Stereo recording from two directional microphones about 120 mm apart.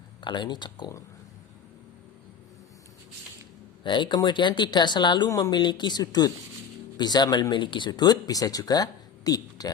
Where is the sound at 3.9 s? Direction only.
40° left (ahead or behind).